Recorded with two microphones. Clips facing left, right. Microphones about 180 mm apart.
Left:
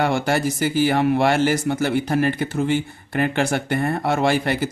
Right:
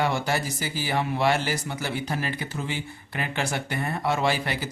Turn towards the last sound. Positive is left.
turn(degrees=55)  # may be behind; listen again after turning